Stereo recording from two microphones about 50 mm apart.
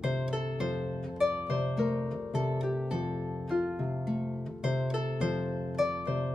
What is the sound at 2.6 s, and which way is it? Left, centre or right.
Music, centre.